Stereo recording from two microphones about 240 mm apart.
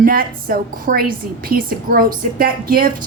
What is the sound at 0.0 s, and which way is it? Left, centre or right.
A woman's voice, right.